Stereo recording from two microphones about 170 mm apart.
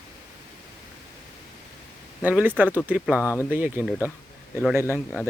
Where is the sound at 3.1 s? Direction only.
15° left (ahead or behind).